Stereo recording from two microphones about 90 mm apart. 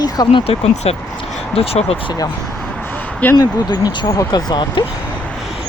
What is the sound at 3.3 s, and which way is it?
Speech, 45° left (ahead or behind).